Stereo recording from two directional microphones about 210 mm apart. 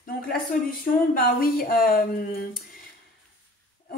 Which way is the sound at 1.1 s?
45° left (ahead or behind).